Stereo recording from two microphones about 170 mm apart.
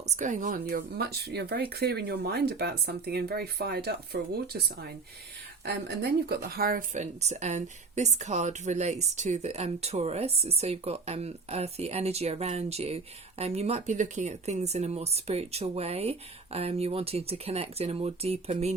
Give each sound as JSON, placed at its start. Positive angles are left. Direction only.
{"t": 0.2, "sound": "speech", "side_deg": -50}